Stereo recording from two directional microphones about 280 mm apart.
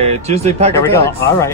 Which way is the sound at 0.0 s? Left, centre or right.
Right.